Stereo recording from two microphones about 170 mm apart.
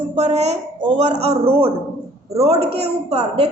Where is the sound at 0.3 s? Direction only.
40° right (ahead or behind).